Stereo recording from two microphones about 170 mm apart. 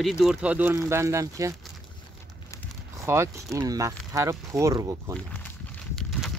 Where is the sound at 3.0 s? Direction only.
15° right (ahead or behind).